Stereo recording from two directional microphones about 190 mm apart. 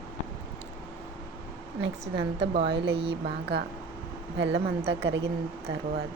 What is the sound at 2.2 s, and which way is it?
Speech, 60° right (ahead or behind).